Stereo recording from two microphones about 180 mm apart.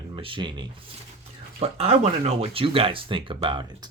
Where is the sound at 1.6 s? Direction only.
35° right (ahead or behind).